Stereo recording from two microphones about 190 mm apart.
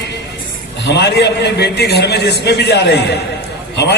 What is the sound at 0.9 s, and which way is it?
A man's voice, 60° left (ahead or behind).